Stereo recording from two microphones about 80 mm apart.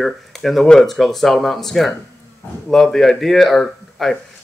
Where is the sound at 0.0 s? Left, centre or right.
Centre.